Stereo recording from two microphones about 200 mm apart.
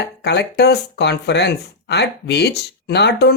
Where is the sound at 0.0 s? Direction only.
60° left (ahead or behind).